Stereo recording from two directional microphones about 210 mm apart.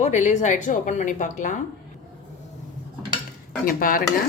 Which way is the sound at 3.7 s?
40° left (ahead or behind).